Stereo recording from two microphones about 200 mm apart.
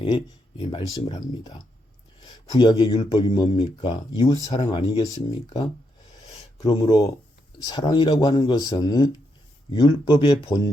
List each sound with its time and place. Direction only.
0.0 s speech: 25° left (ahead or behind)
6.7 s speech: 20° left (ahead or behind)